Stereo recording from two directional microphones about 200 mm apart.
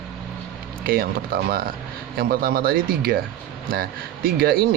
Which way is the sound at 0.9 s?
50° right (ahead or behind).